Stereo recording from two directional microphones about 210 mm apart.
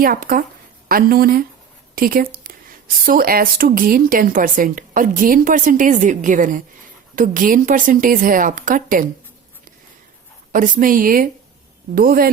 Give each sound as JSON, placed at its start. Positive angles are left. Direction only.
{"t": 0.0, "sound": "a woman's voice", "side_deg": -45}
{"t": 10.5, "sound": "a woman's voice", "side_deg": -40}